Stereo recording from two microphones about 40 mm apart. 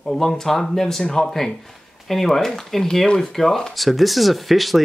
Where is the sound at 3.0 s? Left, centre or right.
Left.